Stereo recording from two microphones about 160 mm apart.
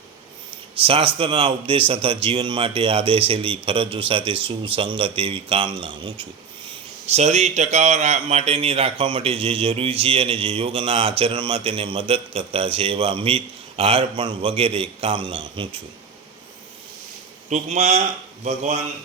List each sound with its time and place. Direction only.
0.8 s a man's voice: 35° right (ahead or behind)
7.1 s a man's voice: 45° right (ahead or behind)
17.5 s speech: 45° right (ahead or behind)